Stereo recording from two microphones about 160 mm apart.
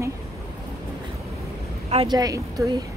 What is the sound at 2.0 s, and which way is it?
Speech, 25° right (ahead or behind).